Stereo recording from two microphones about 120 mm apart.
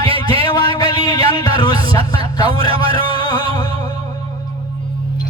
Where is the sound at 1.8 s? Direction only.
50° right (ahead or behind).